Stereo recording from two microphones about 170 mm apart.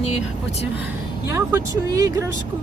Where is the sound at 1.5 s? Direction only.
20° right (ahead or behind).